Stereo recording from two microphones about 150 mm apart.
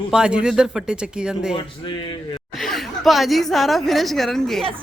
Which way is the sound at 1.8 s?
30° left (ahead or behind).